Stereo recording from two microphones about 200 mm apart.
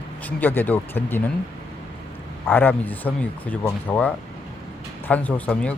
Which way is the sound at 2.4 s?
10° left (ahead or behind).